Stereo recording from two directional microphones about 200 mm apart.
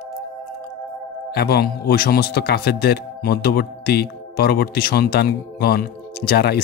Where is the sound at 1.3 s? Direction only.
50° left (ahead or behind).